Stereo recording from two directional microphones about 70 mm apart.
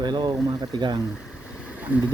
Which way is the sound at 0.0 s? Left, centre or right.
Right.